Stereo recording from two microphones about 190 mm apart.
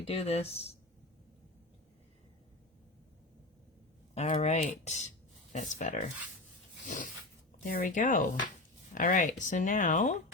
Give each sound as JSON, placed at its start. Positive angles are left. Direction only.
{"t": 0.1, "sound": "speech", "side_deg": 35}
{"t": 4.1, "sound": "speech", "side_deg": 35}